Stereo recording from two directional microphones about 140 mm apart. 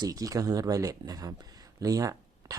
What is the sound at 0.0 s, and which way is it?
Speech, 25° right (ahead or behind).